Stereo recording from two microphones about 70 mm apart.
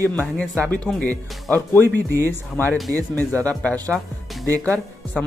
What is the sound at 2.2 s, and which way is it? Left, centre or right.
Speech, left.